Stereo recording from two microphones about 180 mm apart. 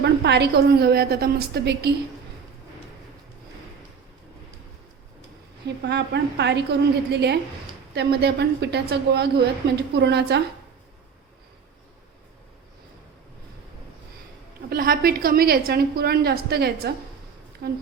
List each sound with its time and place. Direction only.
0.0 s a woman's voice: 70° right (ahead or behind)
5.6 s a woman's voice: 70° right (ahead or behind)
14.7 s a woman's voice: 55° right (ahead or behind)